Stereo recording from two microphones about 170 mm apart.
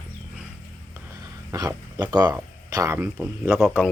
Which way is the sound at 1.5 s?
20° right (ahead or behind).